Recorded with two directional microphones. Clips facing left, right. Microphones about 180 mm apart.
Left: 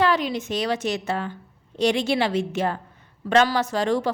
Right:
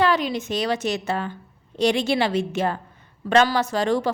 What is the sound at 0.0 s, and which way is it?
A woman's voice, 35° right (ahead or behind).